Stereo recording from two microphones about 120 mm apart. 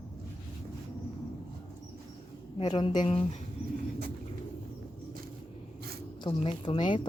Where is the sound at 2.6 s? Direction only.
40° left (ahead or behind).